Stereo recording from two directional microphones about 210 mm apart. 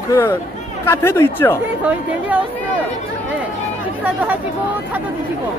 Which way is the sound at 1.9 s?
5° right (ahead or behind).